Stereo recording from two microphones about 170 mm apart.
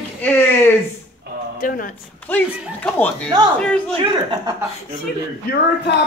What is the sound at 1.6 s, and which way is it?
Speech, 55° left (ahead or behind).